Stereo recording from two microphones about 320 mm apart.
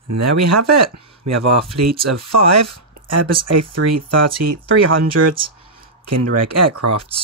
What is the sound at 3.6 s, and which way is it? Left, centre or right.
Speech, right.